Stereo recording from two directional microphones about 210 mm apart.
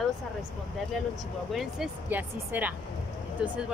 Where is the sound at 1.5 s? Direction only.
Centre (ahead or behind).